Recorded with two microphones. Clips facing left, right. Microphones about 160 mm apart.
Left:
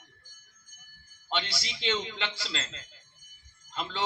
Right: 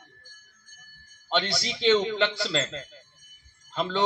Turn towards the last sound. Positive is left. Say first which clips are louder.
# right 8 dB
turn(degrees=-55)  # may be behind; listen again after turning